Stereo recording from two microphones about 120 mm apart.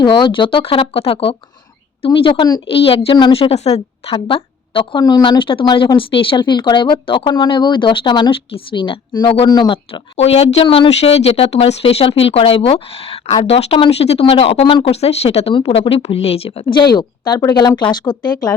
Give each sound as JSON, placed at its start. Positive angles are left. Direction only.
{"t": 0.0, "sound": "speech", "side_deg": 40}
{"t": 3.5, "sound": "a woman's voice", "side_deg": 60}
{"t": 4.1, "sound": "speech", "side_deg": 45}
{"t": 9.7, "sound": "speech", "side_deg": 55}